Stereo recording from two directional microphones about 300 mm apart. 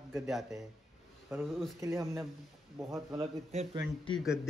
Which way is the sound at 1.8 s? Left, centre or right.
Centre.